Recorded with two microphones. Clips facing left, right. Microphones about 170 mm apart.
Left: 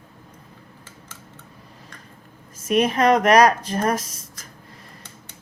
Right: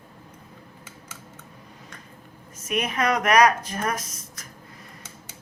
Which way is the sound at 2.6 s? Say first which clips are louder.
Left 7 dB; 35° left (ahead or behind).